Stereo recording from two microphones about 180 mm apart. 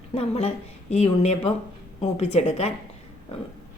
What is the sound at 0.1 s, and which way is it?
Speech, 35° left (ahead or behind).